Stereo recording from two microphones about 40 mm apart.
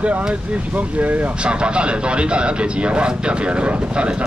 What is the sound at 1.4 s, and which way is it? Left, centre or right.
A man's voice, right.